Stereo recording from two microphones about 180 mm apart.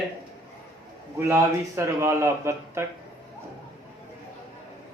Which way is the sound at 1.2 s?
15° right (ahead or behind).